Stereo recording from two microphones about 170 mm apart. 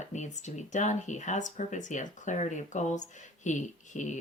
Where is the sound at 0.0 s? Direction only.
45° left (ahead or behind).